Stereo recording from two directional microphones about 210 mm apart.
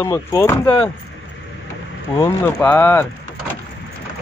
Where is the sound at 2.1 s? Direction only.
10° left (ahead or behind).